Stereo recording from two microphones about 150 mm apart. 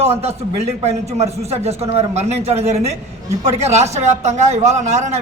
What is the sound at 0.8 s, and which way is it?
A man's voice, 45° right (ahead or behind).